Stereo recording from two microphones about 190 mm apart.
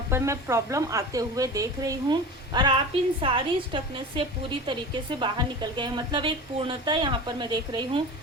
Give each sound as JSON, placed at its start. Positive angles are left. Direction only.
{"t": 0.1, "sound": "speech", "side_deg": -15}